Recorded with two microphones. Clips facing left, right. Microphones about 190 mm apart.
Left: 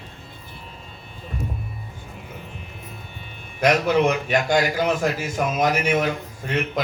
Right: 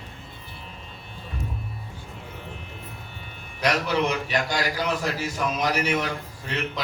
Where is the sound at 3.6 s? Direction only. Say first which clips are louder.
Left 5 dB; 50° left (ahead or behind).